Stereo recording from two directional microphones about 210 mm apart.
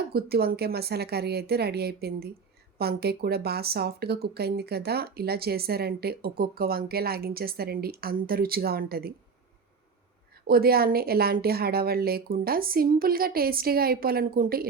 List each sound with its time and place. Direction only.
0.1 s speech: 50° right (ahead or behind)
10.4 s speech: 45° right (ahead or behind)